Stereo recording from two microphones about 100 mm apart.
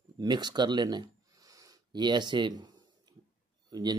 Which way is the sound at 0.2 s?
45° right (ahead or behind).